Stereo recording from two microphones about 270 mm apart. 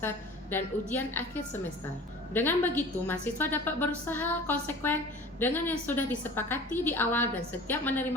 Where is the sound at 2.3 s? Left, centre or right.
Centre.